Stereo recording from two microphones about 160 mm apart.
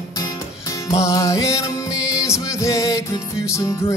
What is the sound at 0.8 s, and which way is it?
Music, 20° left (ahead or behind).